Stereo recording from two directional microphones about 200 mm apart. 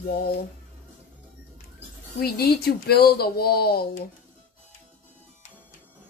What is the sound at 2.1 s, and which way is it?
Speech, 50° left (ahead or behind).